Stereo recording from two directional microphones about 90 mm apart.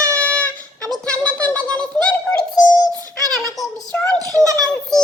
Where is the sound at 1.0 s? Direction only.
15° left (ahead or behind).